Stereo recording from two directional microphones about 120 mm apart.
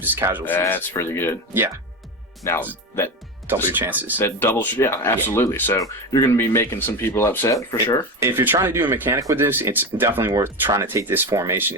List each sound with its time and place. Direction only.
0.0 s speech: 20° right (ahead or behind)
0.6 s speech: 15° left (ahead or behind)
1.5 s speech: 20° right (ahead or behind)
2.4 s speech: 25° left (ahead or behind)
3.5 s speech: 20° right (ahead or behind)
4.2 s speech: 20° left (ahead or behind)
8.2 s speech: 20° right (ahead or behind)